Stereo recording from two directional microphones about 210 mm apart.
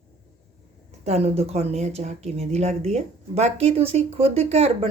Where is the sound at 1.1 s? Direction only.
30° right (ahead or behind).